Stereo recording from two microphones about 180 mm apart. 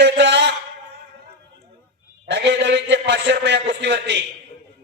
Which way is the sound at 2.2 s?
75° right (ahead or behind).